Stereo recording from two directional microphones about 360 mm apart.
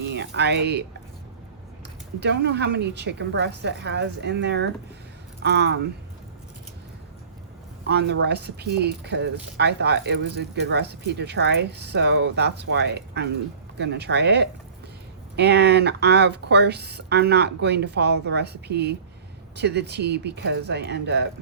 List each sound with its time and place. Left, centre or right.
0.1 s speech: right
2.2 s speech: right
7.9 s speech: right